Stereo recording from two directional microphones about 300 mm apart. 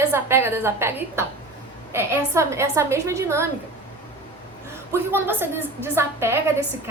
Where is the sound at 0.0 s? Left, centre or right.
Centre.